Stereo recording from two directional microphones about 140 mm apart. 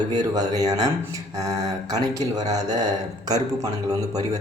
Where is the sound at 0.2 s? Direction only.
25° right (ahead or behind).